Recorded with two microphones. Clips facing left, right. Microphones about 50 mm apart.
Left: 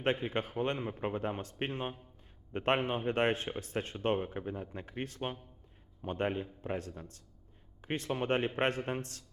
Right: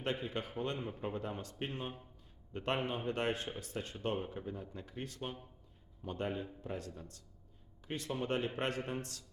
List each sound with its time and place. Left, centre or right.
0.0 s a man's voice: left